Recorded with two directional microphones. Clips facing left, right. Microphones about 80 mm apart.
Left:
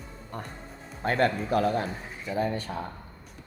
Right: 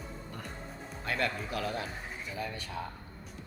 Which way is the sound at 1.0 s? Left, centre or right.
Left.